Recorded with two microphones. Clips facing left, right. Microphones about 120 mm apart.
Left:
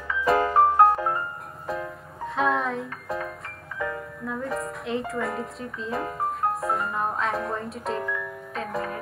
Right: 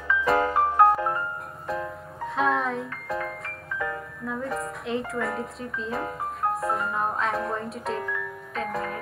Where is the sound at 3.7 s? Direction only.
25° left (ahead or behind).